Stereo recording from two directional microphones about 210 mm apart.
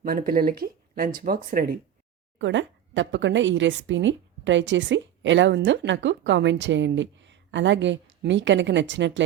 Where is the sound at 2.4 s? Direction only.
60° right (ahead or behind).